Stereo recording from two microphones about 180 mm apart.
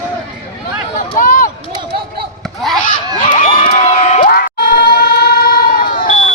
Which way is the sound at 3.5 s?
35° left (ahead or behind).